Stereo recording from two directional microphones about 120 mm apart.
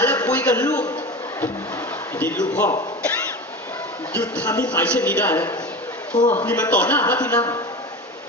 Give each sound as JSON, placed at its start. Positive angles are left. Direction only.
{"t": 0.0, "sound": "a sound", "side_deg": 20}
{"t": 2.1, "sound": "a woman's voice", "side_deg": 15}
{"t": 4.1, "sound": "a woman's voice", "side_deg": 15}